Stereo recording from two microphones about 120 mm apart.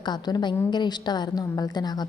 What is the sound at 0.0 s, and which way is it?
A woman's voice, 35° left (ahead or behind).